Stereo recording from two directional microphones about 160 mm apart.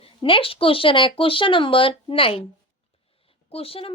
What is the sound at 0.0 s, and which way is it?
Speech, 35° left (ahead or behind).